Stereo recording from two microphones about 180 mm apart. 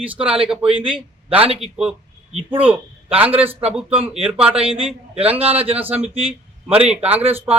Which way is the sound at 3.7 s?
5° right (ahead or behind).